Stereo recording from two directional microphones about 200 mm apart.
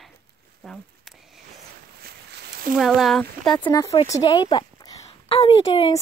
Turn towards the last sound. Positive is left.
turn(degrees=30)  # may be behind; listen again after turning